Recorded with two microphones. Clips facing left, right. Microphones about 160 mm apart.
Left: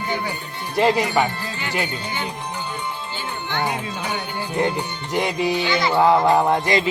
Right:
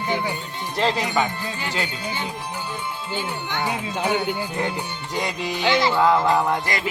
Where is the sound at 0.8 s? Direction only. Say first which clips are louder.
Left 4 dB; 10° left (ahead or behind).